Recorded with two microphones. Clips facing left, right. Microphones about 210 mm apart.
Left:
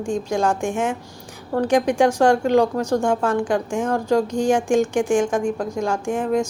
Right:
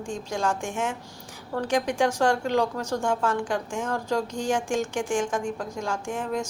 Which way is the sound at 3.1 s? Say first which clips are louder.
Left 5 dB; 55° left (ahead or behind).